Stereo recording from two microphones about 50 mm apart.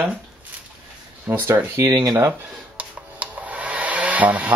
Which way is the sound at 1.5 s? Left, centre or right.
Right.